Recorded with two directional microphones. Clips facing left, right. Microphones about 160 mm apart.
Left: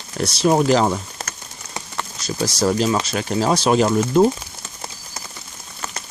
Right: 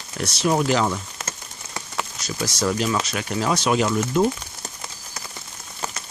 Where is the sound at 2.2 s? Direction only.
35° left (ahead or behind).